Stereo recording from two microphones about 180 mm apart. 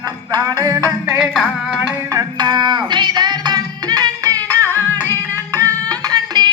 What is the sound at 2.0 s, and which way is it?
Music, 20° right (ahead or behind).